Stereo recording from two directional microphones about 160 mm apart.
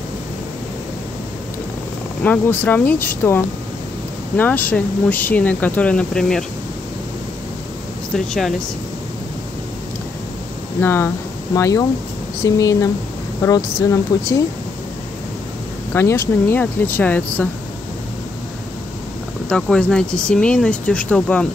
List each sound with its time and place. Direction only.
2.2 s speech: 10° left (ahead or behind)
8.1 s speech: centre (ahead or behind)
10.8 s speech: 15° left (ahead or behind)
15.9 s speech: 15° left (ahead or behind)
19.5 s speech: 5° left (ahead or behind)